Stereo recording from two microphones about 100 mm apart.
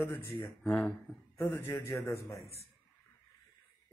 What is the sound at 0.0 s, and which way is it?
Speech, 25° left (ahead or behind).